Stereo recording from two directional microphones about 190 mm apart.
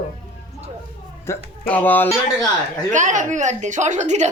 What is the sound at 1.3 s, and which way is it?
Speech, 10° left (ahead or behind).